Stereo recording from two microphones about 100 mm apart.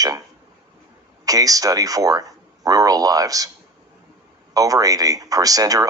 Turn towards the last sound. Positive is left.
turn(degrees=-35)  # may be behind; listen again after turning